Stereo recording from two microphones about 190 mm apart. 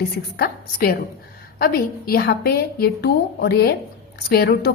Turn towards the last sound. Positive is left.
turn(degrees=55)  # may be behind; listen again after turning